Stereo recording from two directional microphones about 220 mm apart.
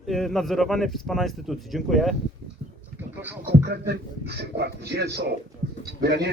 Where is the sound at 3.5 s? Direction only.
45° right (ahead or behind).